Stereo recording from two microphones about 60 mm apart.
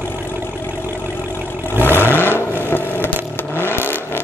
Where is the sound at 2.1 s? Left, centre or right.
Left.